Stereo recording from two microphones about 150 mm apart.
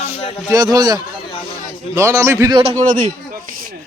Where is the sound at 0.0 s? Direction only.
40° left (ahead or behind).